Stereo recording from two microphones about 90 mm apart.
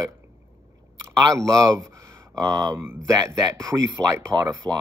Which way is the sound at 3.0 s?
35° right (ahead or behind).